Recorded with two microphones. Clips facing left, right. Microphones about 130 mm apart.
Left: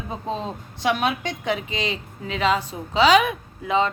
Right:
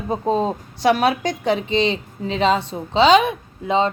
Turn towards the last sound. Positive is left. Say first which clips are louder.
# right 2 dB
turn(degrees=-25)  # may be behind; listen again after turning